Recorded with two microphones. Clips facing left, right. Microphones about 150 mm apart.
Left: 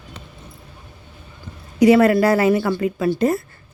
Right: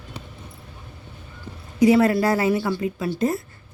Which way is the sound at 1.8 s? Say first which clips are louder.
Left 4 dB; 75° left (ahead or behind).